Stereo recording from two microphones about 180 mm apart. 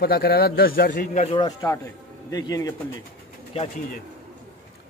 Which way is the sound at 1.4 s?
20° left (ahead or behind).